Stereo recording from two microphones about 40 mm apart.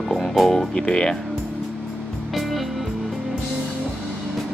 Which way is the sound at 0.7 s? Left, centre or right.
Left.